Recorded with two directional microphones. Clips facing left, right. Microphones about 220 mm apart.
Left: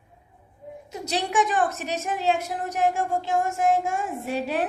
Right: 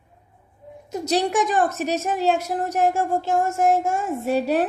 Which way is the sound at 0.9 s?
40° right (ahead or behind).